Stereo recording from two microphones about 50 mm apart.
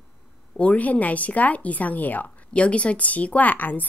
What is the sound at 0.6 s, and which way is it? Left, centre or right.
A woman's voice, left.